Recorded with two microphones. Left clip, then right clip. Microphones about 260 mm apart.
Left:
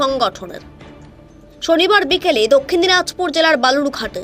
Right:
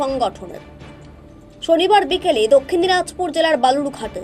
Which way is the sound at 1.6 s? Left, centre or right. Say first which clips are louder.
Left 1 dB; left.